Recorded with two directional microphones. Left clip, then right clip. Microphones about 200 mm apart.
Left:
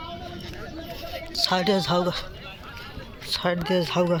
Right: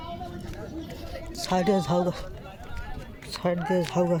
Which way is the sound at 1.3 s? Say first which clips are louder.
Left 2 dB; 10° right (ahead or behind).